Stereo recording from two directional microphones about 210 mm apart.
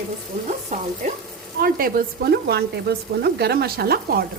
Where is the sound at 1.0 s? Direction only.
35° right (ahead or behind).